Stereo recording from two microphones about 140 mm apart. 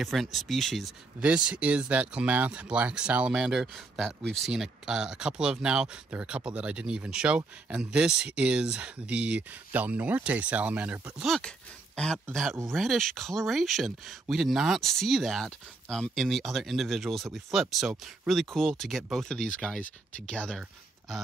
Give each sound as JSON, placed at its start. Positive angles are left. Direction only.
{"t": 0.0, "sound": "speech", "side_deg": 0}
{"t": 11.2, "sound": "speech", "side_deg": 5}